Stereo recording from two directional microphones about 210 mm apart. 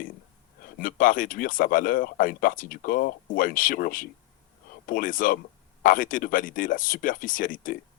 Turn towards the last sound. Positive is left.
turn(degrees=40)  # may be behind; listen again after turning